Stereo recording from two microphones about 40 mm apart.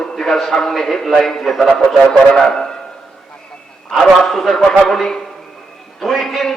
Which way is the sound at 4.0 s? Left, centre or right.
Centre.